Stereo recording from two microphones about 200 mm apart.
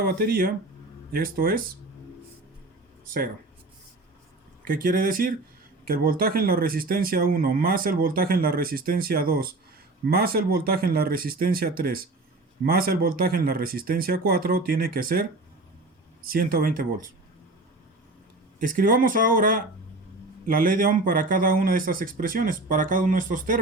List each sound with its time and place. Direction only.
0.0 s speech: 50° right (ahead or behind)
4.6 s speech: 45° right (ahead or behind)
18.6 s speech: 45° right (ahead or behind)